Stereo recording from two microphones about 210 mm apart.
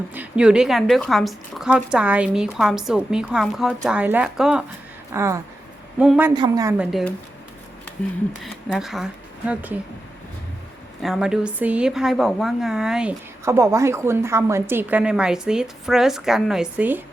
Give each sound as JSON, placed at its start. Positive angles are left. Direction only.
{"t": 0.1, "sound": "a woman's voice", "side_deg": -5}
{"t": 6.3, "sound": "a woman's voice", "side_deg": -20}
{"t": 6.7, "sound": "a woman's voice", "side_deg": 0}
{"t": 8.4, "sound": "a woman's voice", "side_deg": 0}
{"t": 11.0, "sound": "a woman's voice", "side_deg": 0}